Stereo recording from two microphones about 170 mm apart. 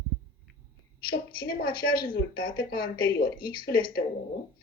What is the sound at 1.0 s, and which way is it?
Speech, 60° left (ahead or behind).